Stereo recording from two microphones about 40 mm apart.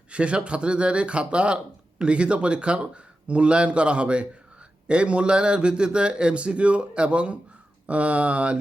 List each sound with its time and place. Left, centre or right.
0.1 s speech: right